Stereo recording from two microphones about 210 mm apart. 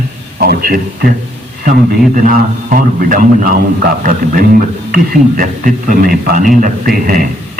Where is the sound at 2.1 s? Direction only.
40° right (ahead or behind).